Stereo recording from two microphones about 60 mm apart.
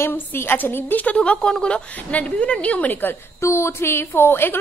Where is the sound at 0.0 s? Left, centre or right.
Left.